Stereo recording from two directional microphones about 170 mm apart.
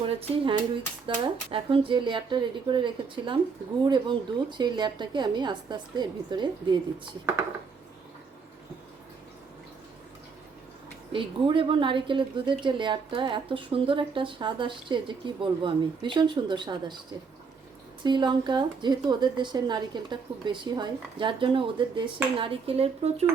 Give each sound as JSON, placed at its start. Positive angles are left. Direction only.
{"t": 0.0, "sound": "speech", "side_deg": -30}
{"t": 11.1, "sound": "speech", "side_deg": -30}
{"t": 18.0, "sound": "speech", "side_deg": -25}